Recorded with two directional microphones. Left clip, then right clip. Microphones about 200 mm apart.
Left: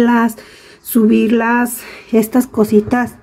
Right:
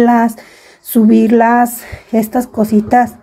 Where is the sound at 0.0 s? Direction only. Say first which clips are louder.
Right 3 dB; centre (ahead or behind).